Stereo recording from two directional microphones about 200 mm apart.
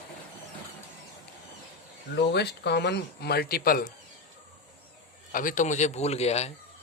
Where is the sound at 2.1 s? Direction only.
55° left (ahead or behind).